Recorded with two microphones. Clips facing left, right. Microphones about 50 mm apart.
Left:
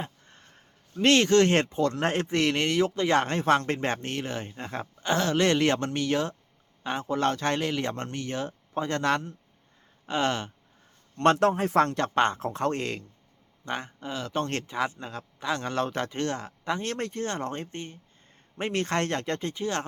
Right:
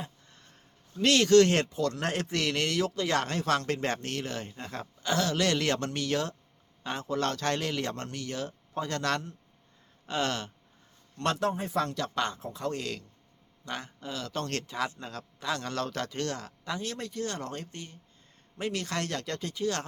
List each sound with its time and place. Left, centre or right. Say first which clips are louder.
0.0 s speech: left 4 dB; left
11.3 s speech: left 7 dB; left
12.4 s speech: left 6 dB; left
12.8 s speech: left 4 dB; left
16.8 s speech: left 4 dB; left